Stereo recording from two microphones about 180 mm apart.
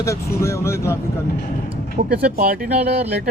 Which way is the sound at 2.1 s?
55° right (ahead or behind).